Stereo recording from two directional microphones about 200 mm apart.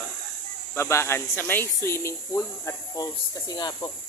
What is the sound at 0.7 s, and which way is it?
Speech, 15° left (ahead or behind).